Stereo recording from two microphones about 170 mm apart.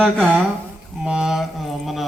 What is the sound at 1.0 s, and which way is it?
A man's voice, 5° right (ahead or behind).